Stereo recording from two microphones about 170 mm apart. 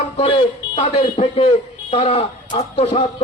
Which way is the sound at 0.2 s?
30° left (ahead or behind).